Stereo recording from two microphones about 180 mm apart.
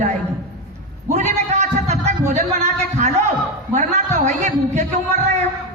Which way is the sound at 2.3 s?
40° right (ahead or behind).